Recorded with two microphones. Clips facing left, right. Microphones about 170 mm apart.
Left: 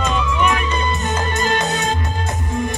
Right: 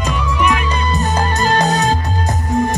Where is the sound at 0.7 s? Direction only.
35° right (ahead or behind).